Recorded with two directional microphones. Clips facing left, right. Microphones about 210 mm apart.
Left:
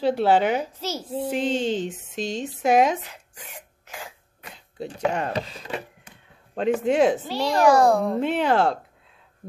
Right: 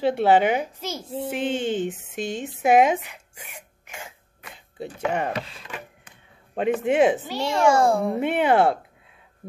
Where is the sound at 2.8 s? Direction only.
10° right (ahead or behind).